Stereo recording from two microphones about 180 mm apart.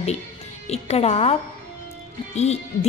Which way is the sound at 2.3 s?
35° left (ahead or behind).